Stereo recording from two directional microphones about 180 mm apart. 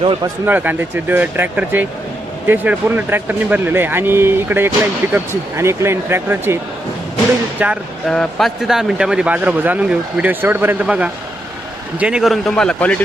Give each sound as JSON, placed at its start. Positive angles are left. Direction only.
{"t": 0.0, "sound": "speech", "side_deg": -30}
{"t": 0.4, "sound": "speech", "side_deg": -10}
{"t": 7.6, "sound": "a man's voice", "side_deg": 0}